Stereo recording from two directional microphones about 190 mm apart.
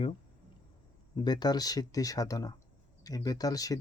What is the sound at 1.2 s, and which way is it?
Speech, 20° left (ahead or behind).